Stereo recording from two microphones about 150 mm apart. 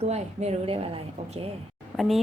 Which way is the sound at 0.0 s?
45° right (ahead or behind).